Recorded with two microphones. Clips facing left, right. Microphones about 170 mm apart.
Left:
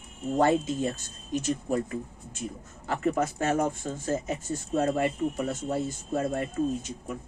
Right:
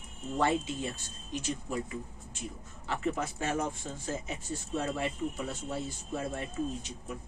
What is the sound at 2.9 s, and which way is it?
Speech, 45° left (ahead or behind).